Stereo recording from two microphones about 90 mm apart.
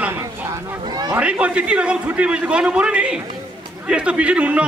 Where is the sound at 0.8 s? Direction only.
50° right (ahead or behind).